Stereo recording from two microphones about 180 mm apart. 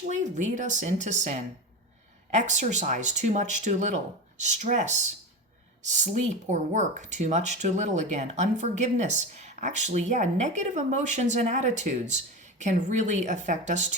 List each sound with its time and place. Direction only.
0.1 s speech: 40° right (ahead or behind)